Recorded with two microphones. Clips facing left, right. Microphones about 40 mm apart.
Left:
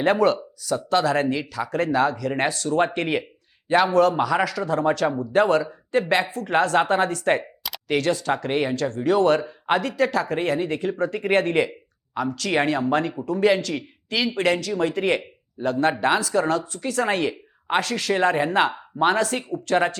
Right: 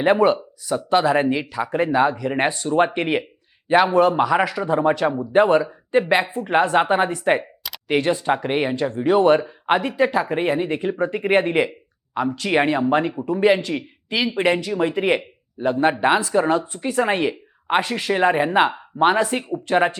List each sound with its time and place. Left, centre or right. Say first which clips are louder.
0.0 s speech: right 3 dB; centre